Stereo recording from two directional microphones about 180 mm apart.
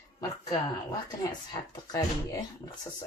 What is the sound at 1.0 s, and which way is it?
Speech, 25° left (ahead or behind).